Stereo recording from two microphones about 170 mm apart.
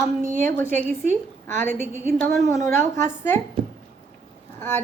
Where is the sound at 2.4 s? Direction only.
20° left (ahead or behind).